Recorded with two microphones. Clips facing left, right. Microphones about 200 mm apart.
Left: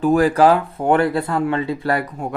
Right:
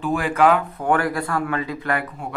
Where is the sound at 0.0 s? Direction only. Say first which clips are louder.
Left 5 dB; 40° left (ahead or behind).